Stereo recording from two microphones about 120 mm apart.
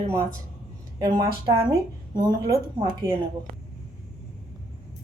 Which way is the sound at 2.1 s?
35° right (ahead or behind).